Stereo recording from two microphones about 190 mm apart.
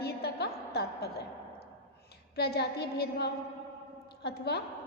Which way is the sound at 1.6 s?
55° left (ahead or behind).